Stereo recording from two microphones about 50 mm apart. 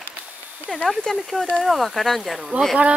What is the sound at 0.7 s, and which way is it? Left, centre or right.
Speech, left.